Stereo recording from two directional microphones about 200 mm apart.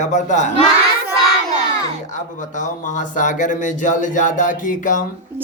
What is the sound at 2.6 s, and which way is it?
Speech, 40° left (ahead or behind).